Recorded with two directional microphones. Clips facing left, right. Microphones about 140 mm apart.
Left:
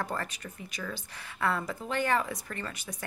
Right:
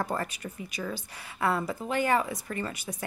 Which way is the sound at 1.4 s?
10° right (ahead or behind).